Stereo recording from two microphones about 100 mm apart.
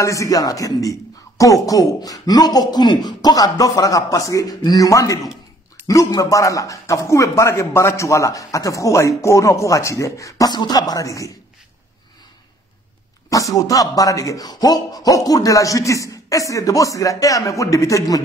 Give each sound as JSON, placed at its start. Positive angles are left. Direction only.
{"t": 0.0, "sound": "a man's voice", "side_deg": 30}
{"t": 13.3, "sound": "a man's voice", "side_deg": 35}